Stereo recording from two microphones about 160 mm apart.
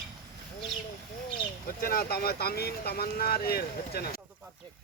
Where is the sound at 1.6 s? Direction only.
70° left (ahead or behind).